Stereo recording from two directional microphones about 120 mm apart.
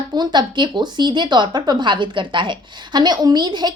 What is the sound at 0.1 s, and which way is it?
A woman's voice, 40° right (ahead or behind).